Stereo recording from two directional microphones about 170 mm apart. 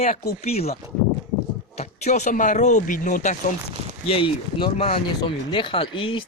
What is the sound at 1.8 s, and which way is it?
Speech, 45° left (ahead or behind).